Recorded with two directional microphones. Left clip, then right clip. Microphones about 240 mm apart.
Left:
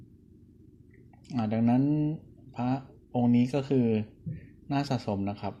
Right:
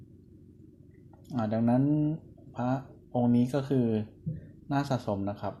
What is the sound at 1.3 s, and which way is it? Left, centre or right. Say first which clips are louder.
Speech: even; left.